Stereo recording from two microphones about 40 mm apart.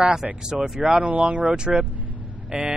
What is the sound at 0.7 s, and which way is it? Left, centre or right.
Speech, right.